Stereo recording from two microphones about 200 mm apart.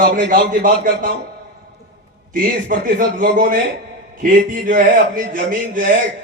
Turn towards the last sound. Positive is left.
turn(degrees=-40)  # may be behind; listen again after turning